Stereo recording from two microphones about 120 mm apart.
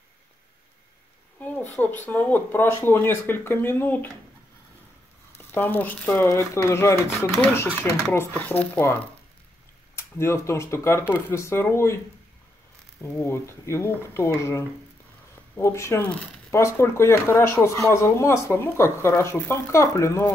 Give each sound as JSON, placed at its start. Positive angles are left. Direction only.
{"t": 1.4, "sound": "a sound", "side_deg": 15}
{"t": 1.8, "sound": "speech", "side_deg": 15}
{"t": 5.5, "sound": "speech", "side_deg": 15}
{"t": 13.0, "sound": "speech", "side_deg": 20}
{"t": 16.1, "sound": "speech", "side_deg": 5}
{"t": 16.4, "sound": "speech", "side_deg": 25}